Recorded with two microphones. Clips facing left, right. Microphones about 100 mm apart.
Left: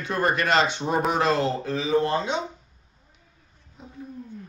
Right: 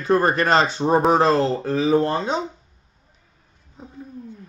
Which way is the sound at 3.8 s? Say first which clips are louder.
Right 4 dB; 35° right (ahead or behind).